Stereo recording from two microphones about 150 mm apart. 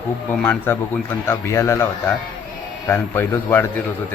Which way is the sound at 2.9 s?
15° left (ahead or behind).